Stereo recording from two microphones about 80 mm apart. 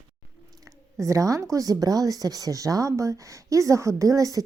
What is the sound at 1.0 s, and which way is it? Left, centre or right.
Speech, right.